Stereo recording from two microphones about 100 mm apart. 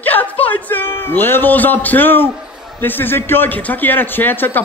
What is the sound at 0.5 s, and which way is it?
A man's voice, 20° left (ahead or behind).